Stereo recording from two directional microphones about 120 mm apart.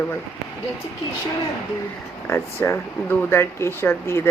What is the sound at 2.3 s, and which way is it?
Speech, 20° left (ahead or behind).